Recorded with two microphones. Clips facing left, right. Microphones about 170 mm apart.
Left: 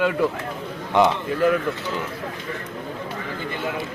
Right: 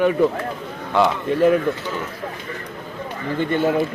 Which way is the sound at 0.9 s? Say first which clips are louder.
Even; 20° left (ahead or behind).